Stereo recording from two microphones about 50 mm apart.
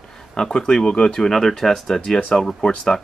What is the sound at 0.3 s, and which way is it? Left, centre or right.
Speech, centre.